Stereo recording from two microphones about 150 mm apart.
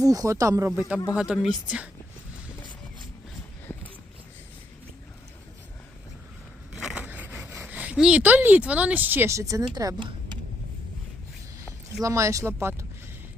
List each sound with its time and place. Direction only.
0.0 s speech: 25° right (ahead or behind)
1.1 s speech: 5° right (ahead or behind)
6.7 s speech: 5° right (ahead or behind); by 10.1 s 25° right (ahead or behind)
12.0 s speech: 20° right (ahead or behind)